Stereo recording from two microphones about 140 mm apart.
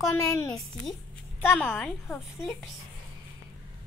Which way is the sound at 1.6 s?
10° left (ahead or behind).